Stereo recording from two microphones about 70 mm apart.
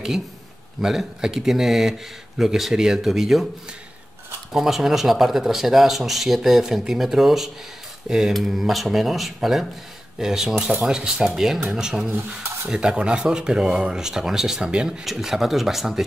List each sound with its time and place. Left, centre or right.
0.7 s speech: centre
4.5 s speech: centre